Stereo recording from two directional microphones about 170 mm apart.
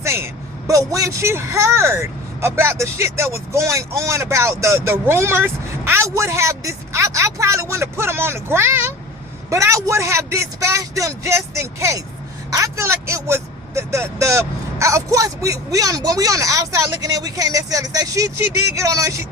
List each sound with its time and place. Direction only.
0.0 s vehicle: 15° right (ahead or behind)
0.7 s speech: 20° right (ahead or behind)